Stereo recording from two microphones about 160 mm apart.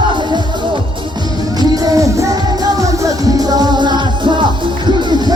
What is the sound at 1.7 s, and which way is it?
Music, 20° right (ahead or behind).